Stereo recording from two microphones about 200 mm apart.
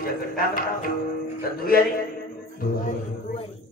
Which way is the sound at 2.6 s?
45° left (ahead or behind).